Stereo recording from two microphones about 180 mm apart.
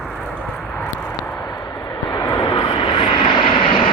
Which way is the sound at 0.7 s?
5° left (ahead or behind).